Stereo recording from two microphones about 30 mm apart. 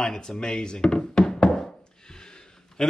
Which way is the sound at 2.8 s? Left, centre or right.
Left.